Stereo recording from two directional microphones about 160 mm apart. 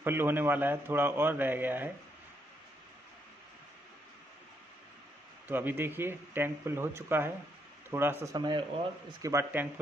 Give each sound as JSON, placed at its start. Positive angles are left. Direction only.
{"t": 0.0, "sound": "a man's voice", "side_deg": -15}
{"t": 5.5, "sound": "a man's voice", "side_deg": -10}
{"t": 8.4, "sound": "a man's voice", "side_deg": -25}